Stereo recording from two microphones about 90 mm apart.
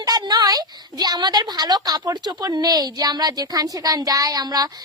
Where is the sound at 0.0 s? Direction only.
45° right (ahead or behind).